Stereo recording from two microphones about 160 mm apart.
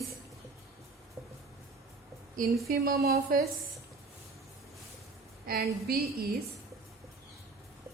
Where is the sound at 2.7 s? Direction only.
70° right (ahead or behind).